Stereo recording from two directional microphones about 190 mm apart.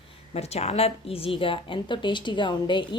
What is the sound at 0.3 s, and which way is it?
A woman's voice, 35° left (ahead or behind).